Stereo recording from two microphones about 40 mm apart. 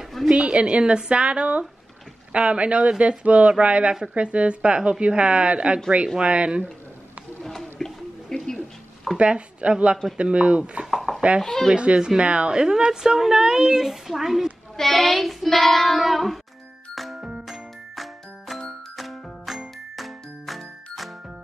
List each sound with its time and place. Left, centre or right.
0.3 s speech: right
7.8 s a sound: centre
9.2 s speech: right
10.9 s chopping: centre
11.1 s speech: right
11.4 s speech: centre
11.7 s a woman's voice: right; by 14.5 s centre
14.8 s child singing: centre
16.9 s music: centre
20.0 s jingle: centre